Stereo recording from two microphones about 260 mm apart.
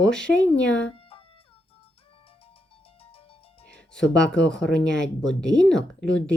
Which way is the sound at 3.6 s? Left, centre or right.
Centre.